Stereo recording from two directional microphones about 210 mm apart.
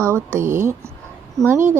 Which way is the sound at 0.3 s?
35° right (ahead or behind).